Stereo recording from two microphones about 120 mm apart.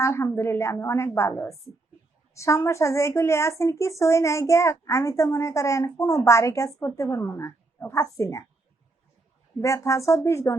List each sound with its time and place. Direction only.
0.0 s a woman's voice: 25° left (ahead or behind)
9.6 s a woman's voice: 25° left (ahead or behind)